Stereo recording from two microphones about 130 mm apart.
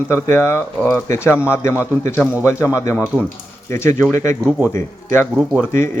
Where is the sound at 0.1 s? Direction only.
20° left (ahead or behind).